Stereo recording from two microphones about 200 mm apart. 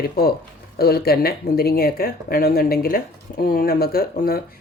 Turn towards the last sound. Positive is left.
turn(degrees=50)  # may be behind; listen again after turning